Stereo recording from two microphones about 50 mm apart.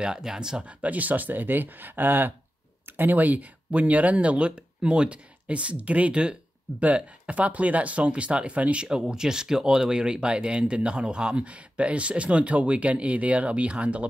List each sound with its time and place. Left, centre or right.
0.0 s speech: centre
0.8 s speech: right
8.8 s speech: centre